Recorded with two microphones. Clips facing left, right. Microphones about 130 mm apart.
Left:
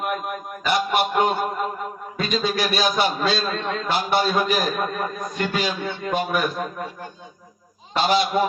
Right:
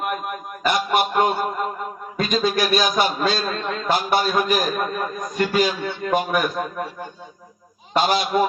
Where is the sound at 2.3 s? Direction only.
45° right (ahead or behind).